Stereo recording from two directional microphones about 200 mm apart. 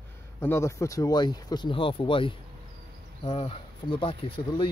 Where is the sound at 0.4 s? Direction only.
15° left (ahead or behind).